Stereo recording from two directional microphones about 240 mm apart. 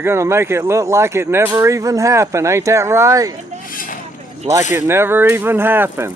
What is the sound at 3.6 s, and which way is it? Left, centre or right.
Vehicle, left.